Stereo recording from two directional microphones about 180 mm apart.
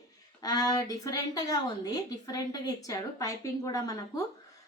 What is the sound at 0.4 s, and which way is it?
A woman's voice, 20° left (ahead or behind).